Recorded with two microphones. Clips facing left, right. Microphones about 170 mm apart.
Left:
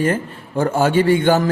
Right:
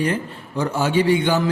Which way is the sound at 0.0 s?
50° left (ahead or behind).